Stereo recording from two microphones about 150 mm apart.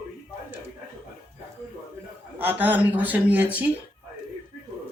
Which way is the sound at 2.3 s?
10° right (ahead or behind).